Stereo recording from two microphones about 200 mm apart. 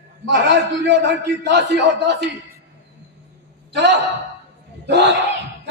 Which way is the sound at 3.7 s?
60° right (ahead or behind).